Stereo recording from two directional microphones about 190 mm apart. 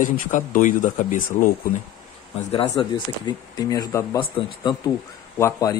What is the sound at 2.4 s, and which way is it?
Speech, 30° left (ahead or behind).